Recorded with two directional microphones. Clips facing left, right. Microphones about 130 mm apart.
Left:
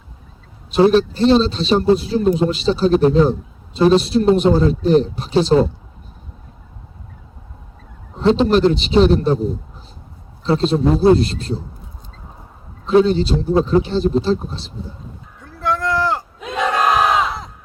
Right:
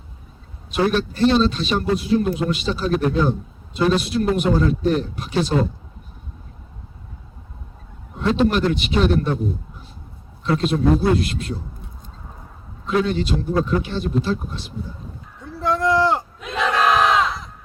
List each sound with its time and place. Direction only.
0.7 s a man's voice: 30° left (ahead or behind)
8.2 s a man's voice: 25° left (ahead or behind)
12.8 s a man's voice: 30° left (ahead or behind)
15.6 s a sound: 20° right (ahead or behind)
16.6 s battle cry: 10° left (ahead or behind)